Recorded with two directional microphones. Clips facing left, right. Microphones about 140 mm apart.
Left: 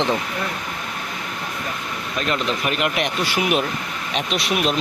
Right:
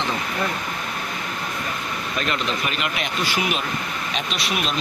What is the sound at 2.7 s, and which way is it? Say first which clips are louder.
Speech: left 5 dB; 60° left (ahead or behind).